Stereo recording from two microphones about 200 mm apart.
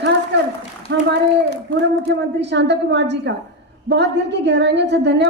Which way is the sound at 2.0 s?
60° right (ahead or behind).